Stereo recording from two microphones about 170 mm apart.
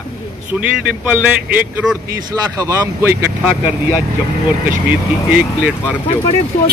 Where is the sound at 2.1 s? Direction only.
20° right (ahead or behind).